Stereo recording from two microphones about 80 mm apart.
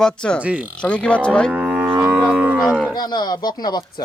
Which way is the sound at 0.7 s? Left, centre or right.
Centre.